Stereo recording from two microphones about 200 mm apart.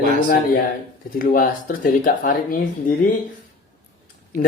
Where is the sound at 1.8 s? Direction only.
45° left (ahead or behind).